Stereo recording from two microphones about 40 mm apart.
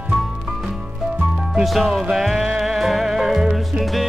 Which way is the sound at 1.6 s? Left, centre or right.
Centre.